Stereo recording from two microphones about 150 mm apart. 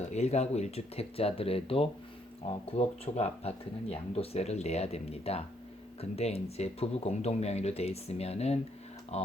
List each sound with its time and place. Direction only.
0.1 s speech: 45° left (ahead or behind)